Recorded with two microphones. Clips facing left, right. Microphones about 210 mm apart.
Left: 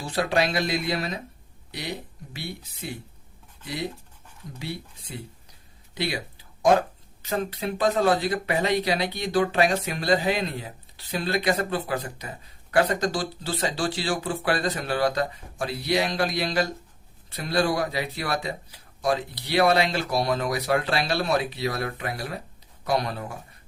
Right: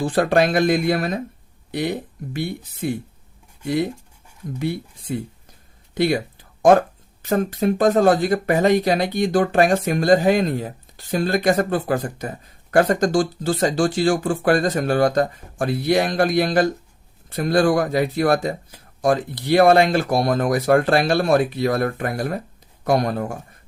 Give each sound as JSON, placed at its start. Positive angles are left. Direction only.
{"t": 0.0, "sound": "speech", "side_deg": -50}